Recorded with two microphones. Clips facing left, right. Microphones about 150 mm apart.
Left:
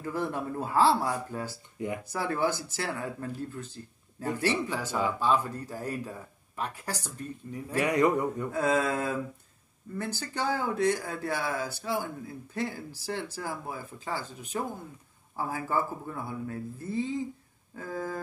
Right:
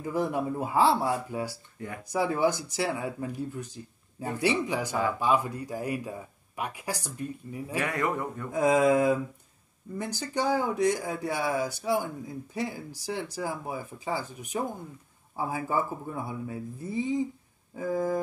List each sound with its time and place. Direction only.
0.0 s speech: 15° right (ahead or behind)
7.8 s a sound: 20° left (ahead or behind)
8.5 s speech: 15° right (ahead or behind)